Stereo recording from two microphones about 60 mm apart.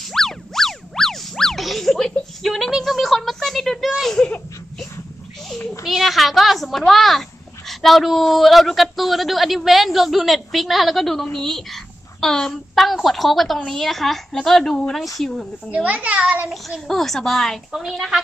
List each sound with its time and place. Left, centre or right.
0.0 s boing: centre
4.0 s laughter: centre
5.9 s a woman's voice: centre
15.7 s a child's voice: right
16.8 s speech: centre